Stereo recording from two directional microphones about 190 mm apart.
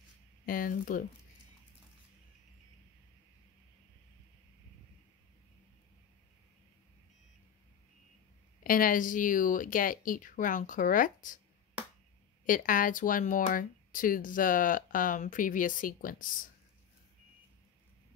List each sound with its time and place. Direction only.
0.5 s speech: 45° left (ahead or behind)
8.6 s speech: 45° left (ahead or behind)
12.4 s speech: 45° left (ahead or behind)